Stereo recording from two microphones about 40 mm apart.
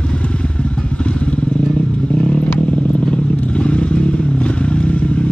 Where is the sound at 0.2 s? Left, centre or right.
Left.